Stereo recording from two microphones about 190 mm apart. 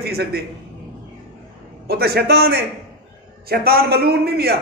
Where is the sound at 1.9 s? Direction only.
55° right (ahead or behind).